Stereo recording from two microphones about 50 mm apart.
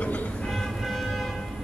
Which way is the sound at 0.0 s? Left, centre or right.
Left.